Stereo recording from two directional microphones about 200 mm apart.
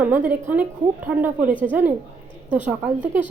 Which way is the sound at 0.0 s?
10° right (ahead or behind).